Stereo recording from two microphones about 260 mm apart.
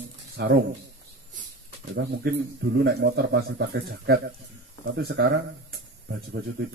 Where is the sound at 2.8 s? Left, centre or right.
Right.